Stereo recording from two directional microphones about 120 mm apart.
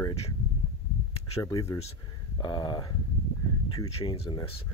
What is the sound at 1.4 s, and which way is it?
Speech, 30° left (ahead or behind).